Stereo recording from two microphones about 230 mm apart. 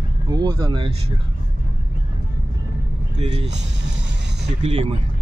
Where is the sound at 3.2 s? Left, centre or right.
Right.